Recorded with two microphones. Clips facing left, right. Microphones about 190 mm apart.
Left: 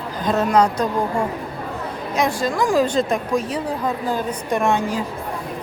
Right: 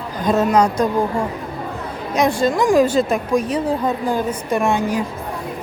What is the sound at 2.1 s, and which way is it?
A woman's voice, 20° right (ahead or behind).